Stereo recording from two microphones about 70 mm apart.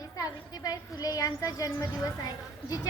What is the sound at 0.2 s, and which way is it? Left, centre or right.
A woman's voice, left.